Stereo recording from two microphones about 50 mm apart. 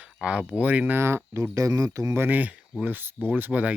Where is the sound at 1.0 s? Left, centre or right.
Right.